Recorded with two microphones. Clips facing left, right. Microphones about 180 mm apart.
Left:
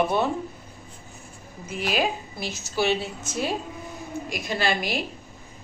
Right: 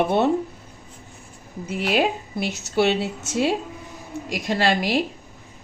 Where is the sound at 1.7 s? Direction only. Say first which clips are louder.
Right 4 dB; 65° right (ahead or behind); by 5.0 s 85° right.